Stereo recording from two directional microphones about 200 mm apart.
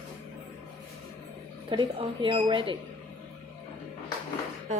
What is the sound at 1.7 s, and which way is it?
Speech, 25° right (ahead or behind).